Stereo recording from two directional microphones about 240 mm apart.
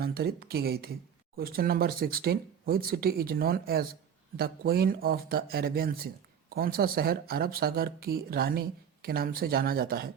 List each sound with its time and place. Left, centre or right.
0.0 s speech: right